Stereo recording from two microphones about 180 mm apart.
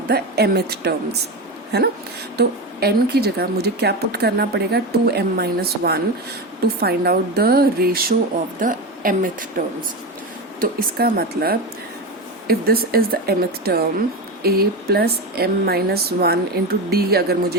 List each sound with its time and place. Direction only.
0.1 s a woman's voice: 60° right (ahead or behind)